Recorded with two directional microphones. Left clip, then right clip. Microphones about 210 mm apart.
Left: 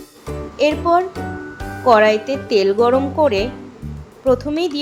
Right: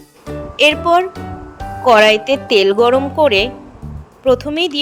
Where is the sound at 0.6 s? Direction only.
30° right (ahead or behind).